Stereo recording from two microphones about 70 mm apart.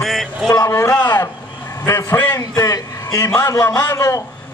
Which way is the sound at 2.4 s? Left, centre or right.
Left.